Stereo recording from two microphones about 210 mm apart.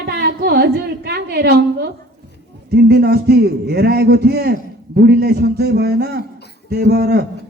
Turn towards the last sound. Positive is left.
turn(degrees=-50)  # may be behind; listen again after turning